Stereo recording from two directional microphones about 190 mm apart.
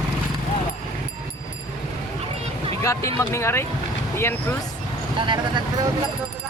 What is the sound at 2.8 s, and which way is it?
Speech, 15° left (ahead or behind).